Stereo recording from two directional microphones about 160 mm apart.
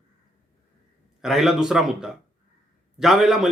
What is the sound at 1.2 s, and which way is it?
Speech, 5° right (ahead or behind).